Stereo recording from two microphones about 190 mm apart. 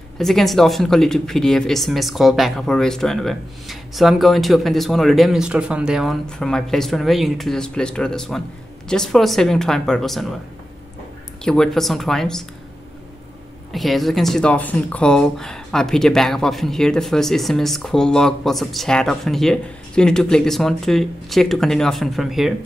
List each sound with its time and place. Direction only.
0.2 s speech: centre (ahead or behind)
11.4 s speech: 5° left (ahead or behind)
13.7 s speech: centre (ahead or behind)